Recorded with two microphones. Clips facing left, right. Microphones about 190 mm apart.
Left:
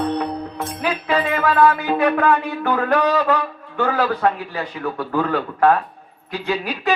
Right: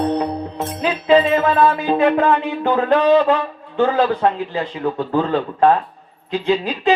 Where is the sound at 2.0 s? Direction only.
25° right (ahead or behind).